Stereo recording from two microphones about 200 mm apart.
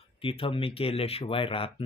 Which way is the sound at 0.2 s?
25° left (ahead or behind).